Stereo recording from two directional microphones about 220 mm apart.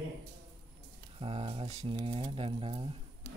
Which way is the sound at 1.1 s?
25° right (ahead or behind).